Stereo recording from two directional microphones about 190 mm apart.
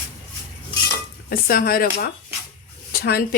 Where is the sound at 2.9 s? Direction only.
55° left (ahead or behind).